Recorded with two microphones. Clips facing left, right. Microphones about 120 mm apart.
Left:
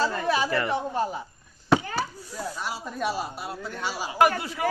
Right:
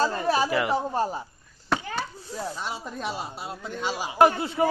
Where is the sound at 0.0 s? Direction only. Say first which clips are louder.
Right 1 dB; 30° right (ahead or behind).